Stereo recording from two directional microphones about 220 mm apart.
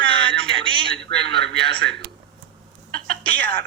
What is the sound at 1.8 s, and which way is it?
Speech, 55° right (ahead or behind).